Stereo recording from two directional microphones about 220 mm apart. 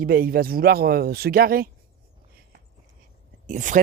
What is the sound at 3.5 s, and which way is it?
Speech, 35° right (ahead or behind).